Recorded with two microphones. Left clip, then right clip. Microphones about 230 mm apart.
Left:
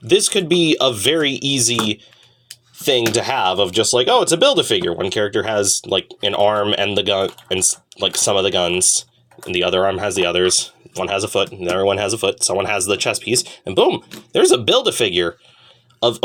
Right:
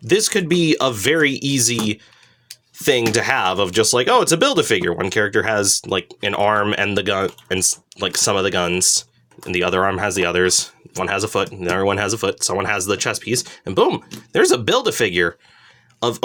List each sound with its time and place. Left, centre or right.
0.1 s speech: right
2.7 s a man's voice: right